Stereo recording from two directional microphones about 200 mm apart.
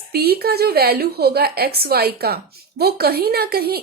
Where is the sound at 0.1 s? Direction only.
50° right (ahead or behind).